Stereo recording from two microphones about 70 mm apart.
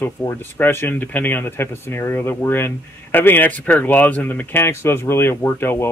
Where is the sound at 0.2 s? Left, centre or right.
Left.